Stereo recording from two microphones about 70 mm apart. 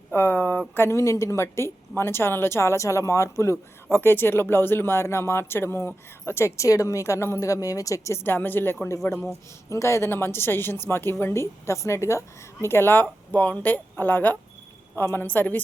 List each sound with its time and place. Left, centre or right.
0.1 s speech: left
0.9 s speech: left
3.9 s speech: left
8.2 s speech: left
9.6 s speech: left